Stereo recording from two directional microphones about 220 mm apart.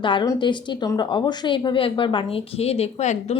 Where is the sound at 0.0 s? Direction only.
20° left (ahead or behind).